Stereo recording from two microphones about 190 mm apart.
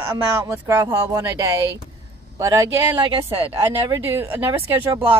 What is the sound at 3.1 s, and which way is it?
Speech, 30° right (ahead or behind).